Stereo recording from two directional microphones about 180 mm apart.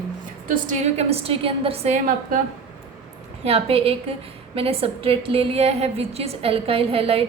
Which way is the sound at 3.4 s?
35° right (ahead or behind).